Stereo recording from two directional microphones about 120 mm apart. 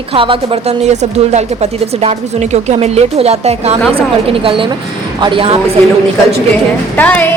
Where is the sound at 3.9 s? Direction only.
50° right (ahead or behind).